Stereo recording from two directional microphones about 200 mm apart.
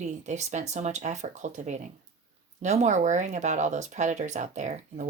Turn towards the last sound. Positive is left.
turn(degrees=-35)  # may be behind; listen again after turning